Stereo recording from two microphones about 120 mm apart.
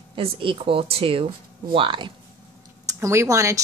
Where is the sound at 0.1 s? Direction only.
45° right (ahead or behind).